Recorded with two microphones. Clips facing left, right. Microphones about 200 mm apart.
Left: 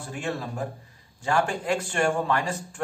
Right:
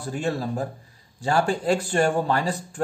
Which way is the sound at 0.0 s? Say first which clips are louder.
Right 5 dB; 35° right (ahead or behind).